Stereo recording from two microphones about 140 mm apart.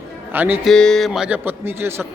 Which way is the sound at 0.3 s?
15° right (ahead or behind).